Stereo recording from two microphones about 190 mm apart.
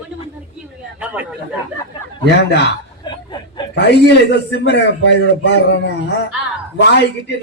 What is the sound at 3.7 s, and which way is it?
A man's voice, 65° left (ahead or behind).